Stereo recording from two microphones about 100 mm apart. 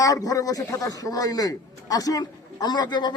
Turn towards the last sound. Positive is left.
turn(degrees=45)  # may be behind; listen again after turning